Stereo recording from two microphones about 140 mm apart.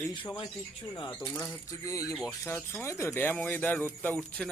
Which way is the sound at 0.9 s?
30° left (ahead or behind).